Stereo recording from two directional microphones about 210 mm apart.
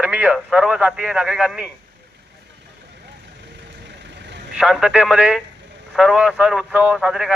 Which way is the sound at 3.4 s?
55° right (ahead or behind).